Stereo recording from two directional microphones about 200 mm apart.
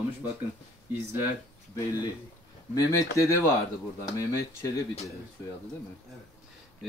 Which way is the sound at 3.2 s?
15° left (ahead or behind).